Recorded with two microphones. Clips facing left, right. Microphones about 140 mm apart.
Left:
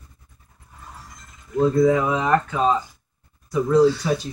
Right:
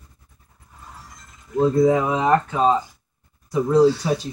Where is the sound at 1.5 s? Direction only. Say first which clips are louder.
Even; 25° right (ahead or behind).